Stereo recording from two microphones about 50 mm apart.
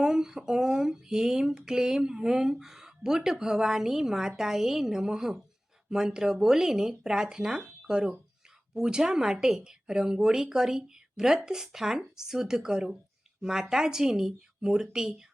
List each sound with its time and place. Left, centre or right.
0.0 s speech: centre